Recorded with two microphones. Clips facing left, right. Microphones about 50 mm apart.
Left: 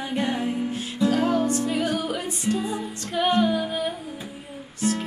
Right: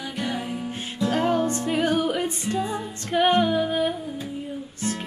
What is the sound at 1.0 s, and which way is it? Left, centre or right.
Music, right.